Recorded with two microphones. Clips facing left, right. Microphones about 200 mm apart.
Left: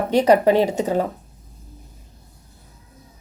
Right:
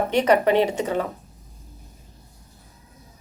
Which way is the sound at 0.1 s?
35° left (ahead or behind).